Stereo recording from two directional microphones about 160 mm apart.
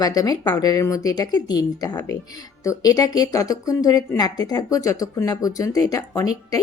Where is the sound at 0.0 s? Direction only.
25° left (ahead or behind).